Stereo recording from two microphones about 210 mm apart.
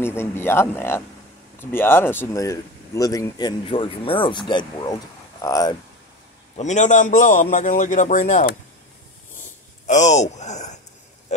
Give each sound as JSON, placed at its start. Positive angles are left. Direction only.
{"t": 0.0, "sound": "speech", "side_deg": 10}
{"t": 6.5, "sound": "a man's voice", "side_deg": 35}
{"t": 9.8, "sound": "a man's voice", "side_deg": 35}